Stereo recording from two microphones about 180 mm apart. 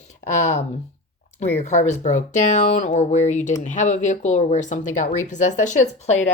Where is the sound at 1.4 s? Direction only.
40° left (ahead or behind).